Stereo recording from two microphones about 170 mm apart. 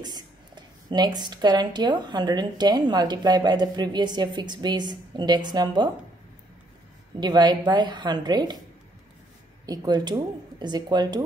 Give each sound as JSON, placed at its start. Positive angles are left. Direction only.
{"t": 0.0, "sound": "speech", "side_deg": -25}
{"t": 7.2, "sound": "speech", "side_deg": -25}
{"t": 9.7, "sound": "speech", "side_deg": -25}